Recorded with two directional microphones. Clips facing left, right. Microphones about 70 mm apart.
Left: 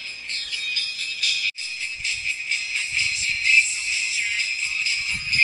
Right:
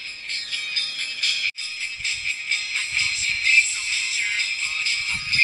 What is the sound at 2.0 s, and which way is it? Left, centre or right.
Music, right.